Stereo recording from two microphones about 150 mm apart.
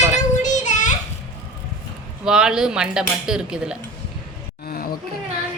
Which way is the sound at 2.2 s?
5° right (ahead or behind).